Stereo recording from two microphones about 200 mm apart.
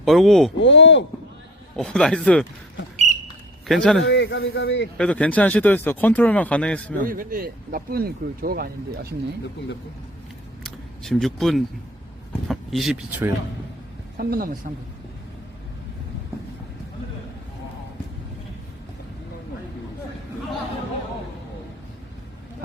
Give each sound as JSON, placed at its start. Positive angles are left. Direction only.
{"t": 0.0, "sound": "speech", "side_deg": 0}
{"t": 0.6, "sound": "speech", "side_deg": 65}
{"t": 1.7, "sound": "speech", "side_deg": 5}
{"t": 3.7, "sound": "speech", "side_deg": 0}
{"t": 4.0, "sound": "speech", "side_deg": 70}
{"t": 4.9, "sound": "speech", "side_deg": 5}
{"t": 7.0, "sound": "speech", "side_deg": -45}
{"t": 10.6, "sound": "a sound", "side_deg": 0}
{"t": 12.5, "sound": "speech", "side_deg": 0}
{"t": 14.2, "sound": "speech", "side_deg": -50}